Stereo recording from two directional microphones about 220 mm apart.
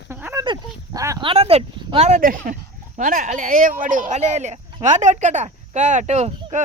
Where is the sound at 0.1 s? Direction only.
10° right (ahead or behind).